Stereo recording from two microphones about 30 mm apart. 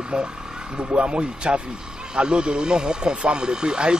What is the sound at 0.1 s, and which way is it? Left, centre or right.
Speech, right.